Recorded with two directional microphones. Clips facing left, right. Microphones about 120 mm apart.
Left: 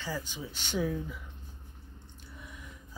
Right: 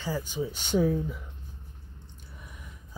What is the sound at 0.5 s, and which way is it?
Speech, 45° right (ahead or behind).